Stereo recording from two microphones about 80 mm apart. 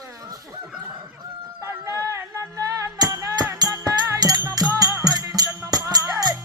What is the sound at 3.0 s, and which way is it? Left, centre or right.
Music, right.